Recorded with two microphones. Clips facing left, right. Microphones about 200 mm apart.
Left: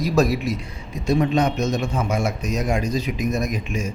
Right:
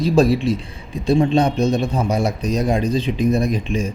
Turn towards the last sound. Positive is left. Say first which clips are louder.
# right 5 dB
turn(degrees=-30)  # may be behind; listen again after turning